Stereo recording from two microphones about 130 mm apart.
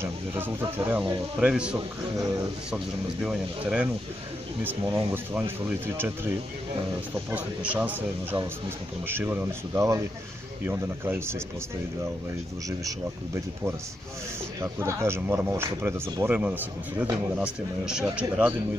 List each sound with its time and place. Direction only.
0.0 s speech: 15° right (ahead or behind)
4.8 s speech: 20° right (ahead or behind)
14.6 s speech: 20° right (ahead or behind); by 18.0 s 5° right (ahead or behind)